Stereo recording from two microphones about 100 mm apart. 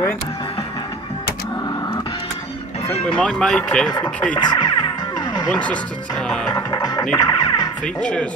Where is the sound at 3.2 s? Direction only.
5° left (ahead or behind).